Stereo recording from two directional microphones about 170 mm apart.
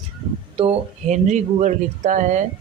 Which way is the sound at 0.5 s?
35° right (ahead or behind).